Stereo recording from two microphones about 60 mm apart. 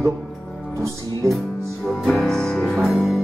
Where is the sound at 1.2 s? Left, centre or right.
Right.